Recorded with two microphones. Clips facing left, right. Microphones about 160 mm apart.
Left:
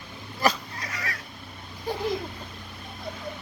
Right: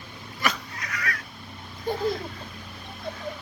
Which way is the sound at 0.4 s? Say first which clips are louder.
Left 4 dB; 25° left (ahead or behind).